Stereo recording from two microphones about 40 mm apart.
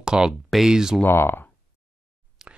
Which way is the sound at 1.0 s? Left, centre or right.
Left.